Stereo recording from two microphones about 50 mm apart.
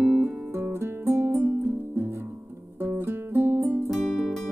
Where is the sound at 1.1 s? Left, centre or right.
Right.